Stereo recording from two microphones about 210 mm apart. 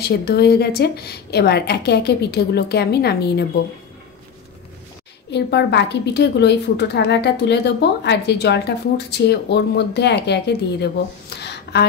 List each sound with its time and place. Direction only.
0.0 s a woman's voice: 50° left (ahead or behind)
5.3 s a woman's voice: 55° left (ahead or behind)